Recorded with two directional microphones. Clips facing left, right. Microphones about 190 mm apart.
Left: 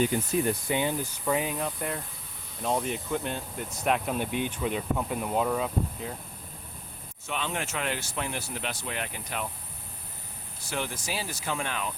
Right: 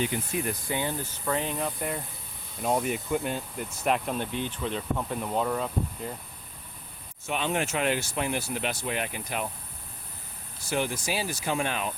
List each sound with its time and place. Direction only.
0.4 s speech: 20° left (ahead or behind); by 6.1 s centre (ahead or behind)
7.3 s speech: 15° right (ahead or behind)
10.7 s speech: 10° right (ahead or behind)